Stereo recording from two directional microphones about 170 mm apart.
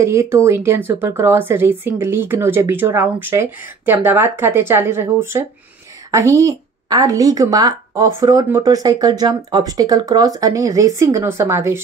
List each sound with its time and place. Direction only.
0.0 s a woman's voice: 15° right (ahead or behind)